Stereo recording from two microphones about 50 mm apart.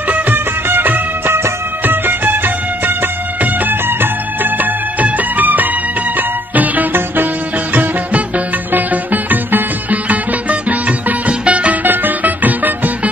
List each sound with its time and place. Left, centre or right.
0.1 s music: right
8.7 s music: right
11.8 s music: right